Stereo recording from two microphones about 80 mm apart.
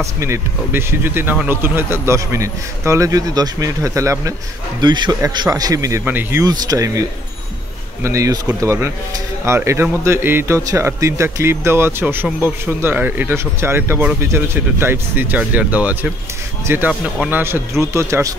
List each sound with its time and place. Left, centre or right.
0.0 s speech: right
0.7 s speech: right
4.8 s a man's voice: right
5.5 s speech: right
6.0 s speech: right
6.4 s speech: right
9.4 s speech: right